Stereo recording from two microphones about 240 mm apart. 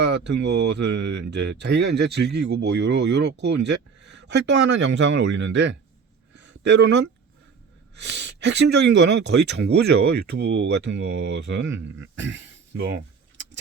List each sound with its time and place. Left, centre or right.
0.0 s speech: right
6.3 s a sound: right
7.9 s speech: right